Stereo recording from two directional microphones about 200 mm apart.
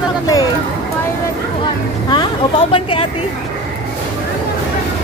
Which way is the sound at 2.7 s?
30° left (ahead or behind).